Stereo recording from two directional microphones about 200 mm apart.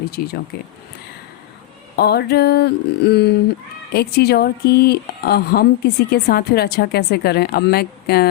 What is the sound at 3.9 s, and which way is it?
Speech, 55° left (ahead or behind).